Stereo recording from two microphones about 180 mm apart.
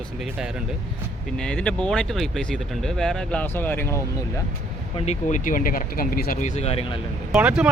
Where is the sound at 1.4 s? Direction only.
5° left (ahead or behind).